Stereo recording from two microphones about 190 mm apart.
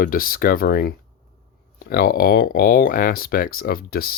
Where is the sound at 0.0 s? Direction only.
50° left (ahead or behind).